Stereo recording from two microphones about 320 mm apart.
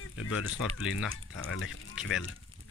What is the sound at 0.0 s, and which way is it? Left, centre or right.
Speech, left.